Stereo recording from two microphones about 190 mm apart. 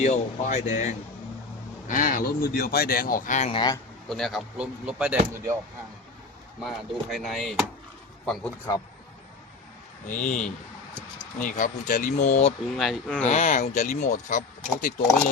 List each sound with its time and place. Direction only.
0.0 s speech: 35° left (ahead or behind)
3.5 s a man's voice: 20° left (ahead or behind)
4.1 s speech: centre (ahead or behind)
6.6 s speech: centre (ahead or behind)
8.7 s speech: 20° left (ahead or behind)
10.1 s speech: 40° left (ahead or behind)
11.3 s speech: 45° left (ahead or behind)
12.7 s speech: centre (ahead or behind)
13.2 s speech: 40° left (ahead or behind)